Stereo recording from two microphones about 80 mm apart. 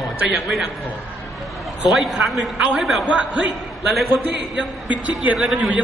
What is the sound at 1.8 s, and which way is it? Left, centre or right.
A man's voice, centre.